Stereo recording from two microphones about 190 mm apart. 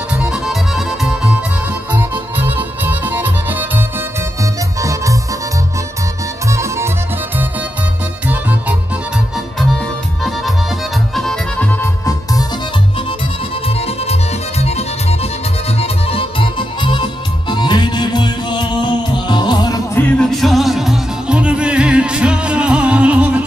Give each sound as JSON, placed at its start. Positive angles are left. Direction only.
{"t": 0.2, "sound": "music", "side_deg": -5}
{"t": 6.4, "sound": "music", "side_deg": -15}
{"t": 8.3, "sound": "music", "side_deg": -10}
{"t": 11.1, "sound": "accordion", "side_deg": 5}
{"t": 13.7, "sound": "music", "side_deg": 30}